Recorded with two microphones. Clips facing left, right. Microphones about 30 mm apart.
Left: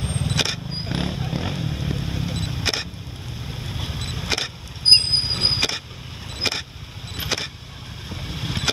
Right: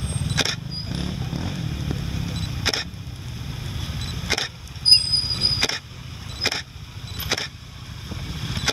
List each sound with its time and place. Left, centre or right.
0.0 s vehicle: centre
0.8 s vehicle: left
6.4 s vehicle: centre
8.1 s vehicle: centre